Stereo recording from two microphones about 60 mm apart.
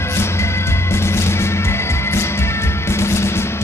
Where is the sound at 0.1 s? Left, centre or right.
Left.